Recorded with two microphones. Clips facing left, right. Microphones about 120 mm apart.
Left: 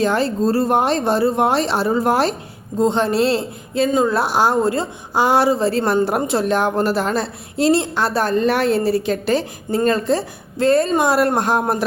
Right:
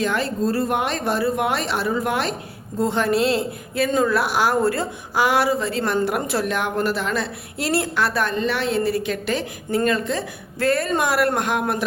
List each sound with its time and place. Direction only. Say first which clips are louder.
0.0 s a woman's voice: left 4 dB; 30° left (ahead or behind)
2.7 s a woman's voice: left 3 dB; 25° left (ahead or behind)